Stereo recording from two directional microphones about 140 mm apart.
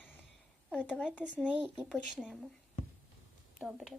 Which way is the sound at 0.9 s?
10° left (ahead or behind).